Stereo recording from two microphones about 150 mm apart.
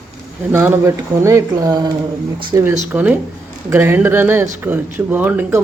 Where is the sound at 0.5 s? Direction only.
15° right (ahead or behind).